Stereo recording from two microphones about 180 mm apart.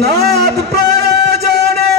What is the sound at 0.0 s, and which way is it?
Music, 65° right (ahead or behind).